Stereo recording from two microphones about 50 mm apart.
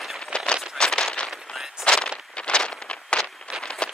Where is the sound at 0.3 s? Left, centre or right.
Centre.